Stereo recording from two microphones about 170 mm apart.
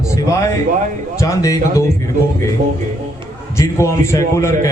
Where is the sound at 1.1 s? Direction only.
20° left (ahead or behind).